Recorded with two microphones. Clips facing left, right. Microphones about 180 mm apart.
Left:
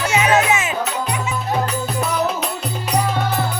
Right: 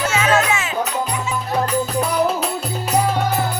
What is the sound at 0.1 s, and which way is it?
Music, 15° left (ahead or behind).